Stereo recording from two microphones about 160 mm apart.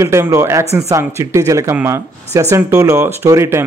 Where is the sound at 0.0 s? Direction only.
20° right (ahead or behind).